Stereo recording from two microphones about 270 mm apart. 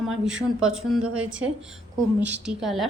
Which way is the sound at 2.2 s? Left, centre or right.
Right.